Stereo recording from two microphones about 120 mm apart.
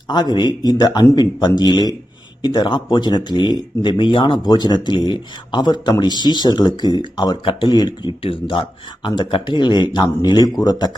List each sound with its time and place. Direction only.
0.1 s speech: 35° left (ahead or behind)